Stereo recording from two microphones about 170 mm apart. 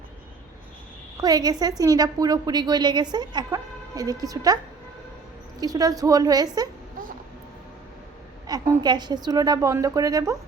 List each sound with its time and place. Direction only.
1.2 s a woman's voice: 20° right (ahead or behind)
5.5 s a woman's voice: 20° right (ahead or behind)
8.4 s a woman's voice: 25° right (ahead or behind)